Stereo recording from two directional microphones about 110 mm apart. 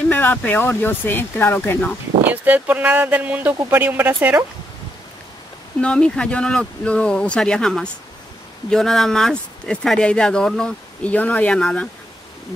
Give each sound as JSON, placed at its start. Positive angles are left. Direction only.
{"t": 0.1, "sound": "speech", "side_deg": 15}
{"t": 2.2, "sound": "speech", "side_deg": -15}
{"t": 5.8, "sound": "speech", "side_deg": 10}